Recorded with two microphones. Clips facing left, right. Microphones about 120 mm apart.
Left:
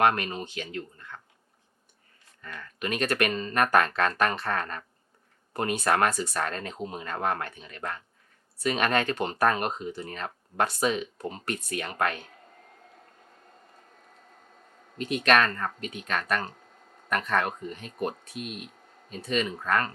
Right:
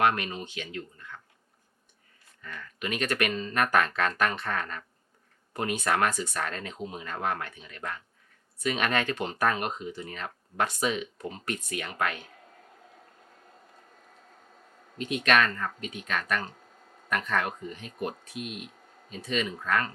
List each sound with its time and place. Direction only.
0.0 s speech: 40° left (ahead or behind)
2.4 s speech: 40° left (ahead or behind)
12.1 s a sound: 5° right (ahead or behind)
15.1 s speech: 40° left (ahead or behind)
17.1 s speech: 35° left (ahead or behind)
18.1 s speech: 5° right (ahead or behind)
19.3 s speech: 40° left (ahead or behind)